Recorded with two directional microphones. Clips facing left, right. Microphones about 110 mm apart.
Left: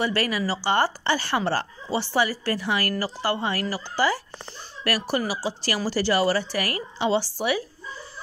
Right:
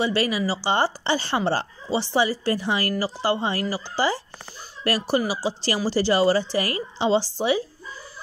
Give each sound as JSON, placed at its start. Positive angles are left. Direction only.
{"t": 0.0, "sound": "speech", "side_deg": -20}